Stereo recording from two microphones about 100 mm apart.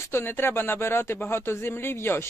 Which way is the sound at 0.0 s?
25° left (ahead or behind).